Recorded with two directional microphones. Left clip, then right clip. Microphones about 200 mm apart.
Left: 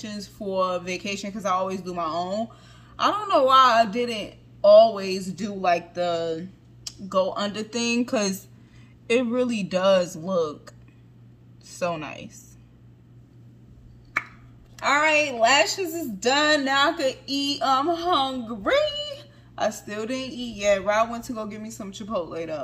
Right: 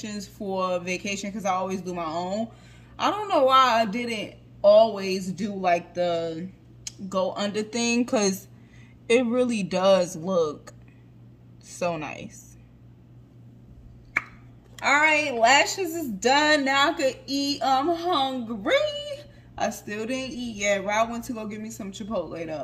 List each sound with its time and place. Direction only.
0.0 s a woman's voice: 10° right (ahead or behind)
15.0 s a woman's voice: 5° right (ahead or behind)